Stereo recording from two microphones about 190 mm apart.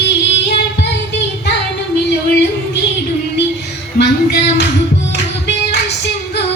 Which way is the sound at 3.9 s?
60° left (ahead or behind).